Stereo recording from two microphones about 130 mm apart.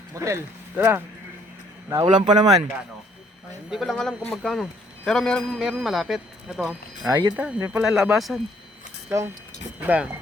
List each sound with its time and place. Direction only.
0.1 s speech: 25° right (ahead or behind)
1.9 s speech: 35° right (ahead or behind)
3.7 s speech: centre (ahead or behind)
7.0 s speech: 30° right (ahead or behind)
7.6 s speech: 15° right (ahead or behind)
7.9 s speech: centre (ahead or behind)
9.0 s speech: 20° right (ahead or behind)